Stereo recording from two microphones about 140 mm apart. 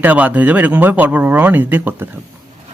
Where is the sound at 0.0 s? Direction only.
10° right (ahead or behind).